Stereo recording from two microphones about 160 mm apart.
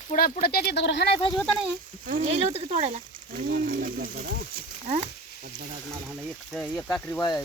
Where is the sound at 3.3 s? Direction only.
60° right (ahead or behind).